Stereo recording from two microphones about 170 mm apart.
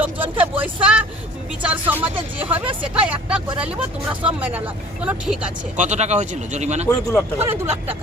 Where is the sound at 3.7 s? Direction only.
30° right (ahead or behind).